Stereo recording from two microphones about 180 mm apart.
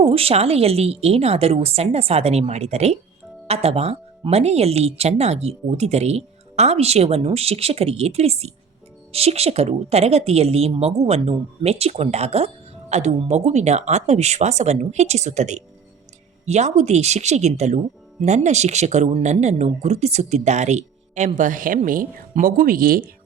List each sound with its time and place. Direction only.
0.0 s speech: 30° right (ahead or behind); by 23.0 s 50° right (ahead or behind)